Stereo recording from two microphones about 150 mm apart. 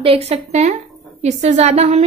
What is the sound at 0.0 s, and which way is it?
A woman's voice, 40° right (ahead or behind).